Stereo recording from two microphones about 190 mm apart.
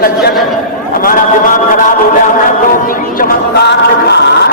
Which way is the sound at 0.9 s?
45° left (ahead or behind).